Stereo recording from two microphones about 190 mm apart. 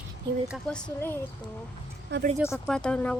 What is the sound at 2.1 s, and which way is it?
Speech, 65° right (ahead or behind).